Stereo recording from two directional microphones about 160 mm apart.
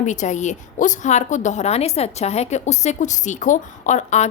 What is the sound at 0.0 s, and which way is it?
A woman's voice, 50° left (ahead or behind).